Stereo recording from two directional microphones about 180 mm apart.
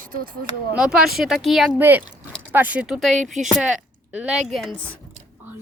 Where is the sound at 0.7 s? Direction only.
5° right (ahead or behind).